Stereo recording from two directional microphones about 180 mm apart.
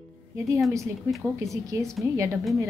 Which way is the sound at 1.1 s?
15° right (ahead or behind).